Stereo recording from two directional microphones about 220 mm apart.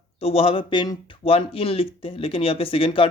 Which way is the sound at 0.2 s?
25° left (ahead or behind).